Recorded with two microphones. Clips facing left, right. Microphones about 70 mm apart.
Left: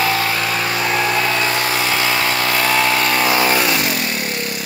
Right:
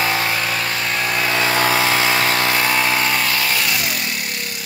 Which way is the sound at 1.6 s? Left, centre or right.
Right.